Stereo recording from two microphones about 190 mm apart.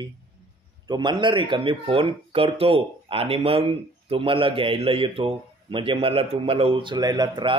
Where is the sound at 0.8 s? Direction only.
25° right (ahead or behind).